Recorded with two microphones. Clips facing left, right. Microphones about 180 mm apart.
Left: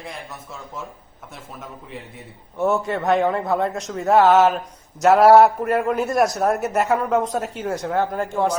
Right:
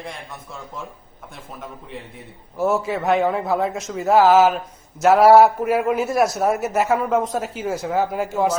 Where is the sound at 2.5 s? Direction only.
Centre (ahead or behind).